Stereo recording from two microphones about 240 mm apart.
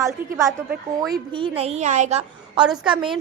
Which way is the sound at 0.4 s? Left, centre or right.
Centre.